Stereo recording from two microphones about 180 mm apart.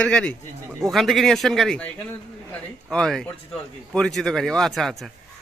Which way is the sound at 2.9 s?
5° left (ahead or behind).